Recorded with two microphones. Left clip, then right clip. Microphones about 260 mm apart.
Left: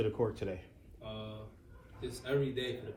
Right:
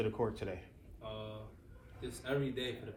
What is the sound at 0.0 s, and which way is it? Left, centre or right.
Speech, right.